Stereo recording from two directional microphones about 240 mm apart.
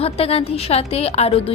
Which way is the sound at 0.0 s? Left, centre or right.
Left.